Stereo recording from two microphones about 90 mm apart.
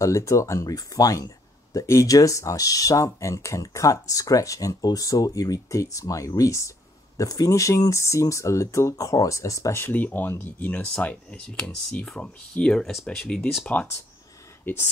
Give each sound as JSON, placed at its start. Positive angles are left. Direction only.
{"t": 0.0, "sound": "speech", "side_deg": 35}